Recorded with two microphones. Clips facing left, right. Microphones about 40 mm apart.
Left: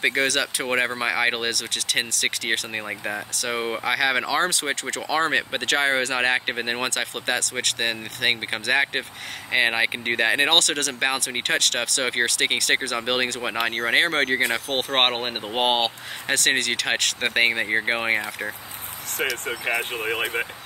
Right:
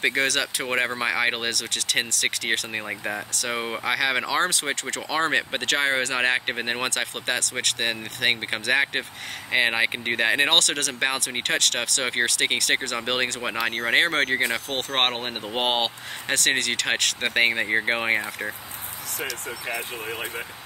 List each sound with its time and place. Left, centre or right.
0.0 s speech: centre
14.8 s speech: centre
15.5 s speech: centre
19.4 s speech: left